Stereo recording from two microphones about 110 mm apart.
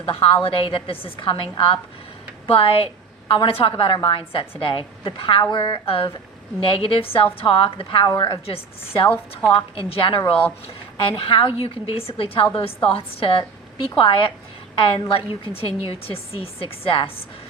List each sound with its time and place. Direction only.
0.4 s a woman's voice: 55° left (ahead or behind)
8.0 s a woman's voice: 40° left (ahead or behind)